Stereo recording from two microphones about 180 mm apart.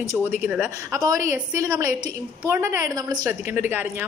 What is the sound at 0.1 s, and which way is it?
A woman's voice, 10° right (ahead or behind).